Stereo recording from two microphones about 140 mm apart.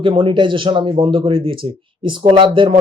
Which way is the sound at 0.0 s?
40° right (ahead or behind).